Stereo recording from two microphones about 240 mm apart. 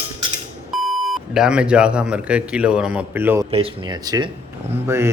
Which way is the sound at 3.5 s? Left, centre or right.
Right.